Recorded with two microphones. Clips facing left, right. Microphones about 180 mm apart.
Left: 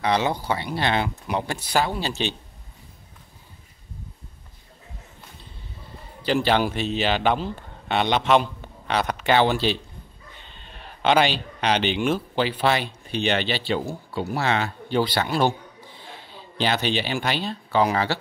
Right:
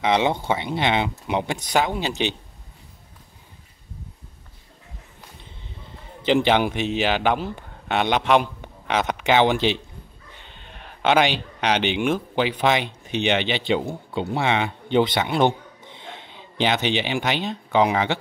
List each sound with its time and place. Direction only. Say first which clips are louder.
0.0 s speech: right 2 dB; 20° right (ahead or behind)
6.2 s speech: right 2 dB; 20° right (ahead or behind)
11.0 s speech: right 1 dB; 10° right (ahead or behind)